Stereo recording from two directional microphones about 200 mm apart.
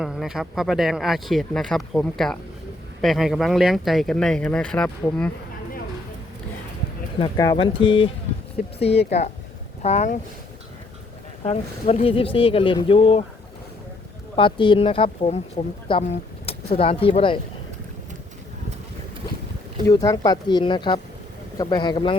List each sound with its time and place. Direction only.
0.0 s speech: centre (ahead or behind)
7.2 s speech: 20° left (ahead or behind)
11.4 s speech: 30° left (ahead or behind)
14.3 s speech: 25° left (ahead or behind)
19.9 s speech: 20° left (ahead or behind)